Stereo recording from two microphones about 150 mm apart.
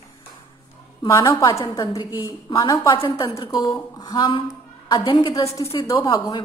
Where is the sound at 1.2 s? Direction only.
35° left (ahead or behind).